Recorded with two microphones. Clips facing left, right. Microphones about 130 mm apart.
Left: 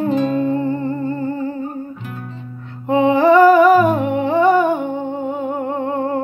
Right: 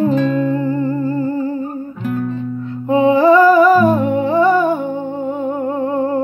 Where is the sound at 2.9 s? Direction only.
20° left (ahead or behind).